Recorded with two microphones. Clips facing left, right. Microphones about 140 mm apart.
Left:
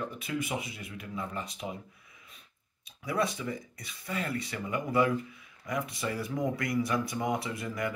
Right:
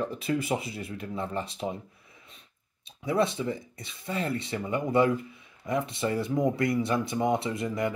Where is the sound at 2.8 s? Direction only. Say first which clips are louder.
Right 5 dB; 25° right (ahead or behind).